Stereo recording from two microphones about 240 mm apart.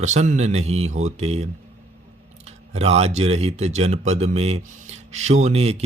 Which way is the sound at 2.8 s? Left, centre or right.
Right.